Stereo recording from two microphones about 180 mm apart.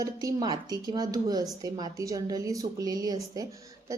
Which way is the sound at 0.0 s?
20° right (ahead or behind).